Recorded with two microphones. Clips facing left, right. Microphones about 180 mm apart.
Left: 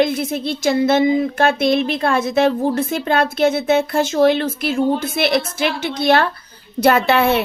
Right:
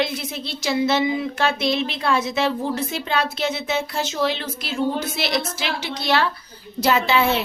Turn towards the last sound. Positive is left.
turn(degrees=60)  # may be behind; listen again after turning